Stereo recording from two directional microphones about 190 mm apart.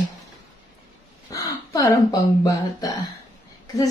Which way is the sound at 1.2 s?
20° left (ahead or behind).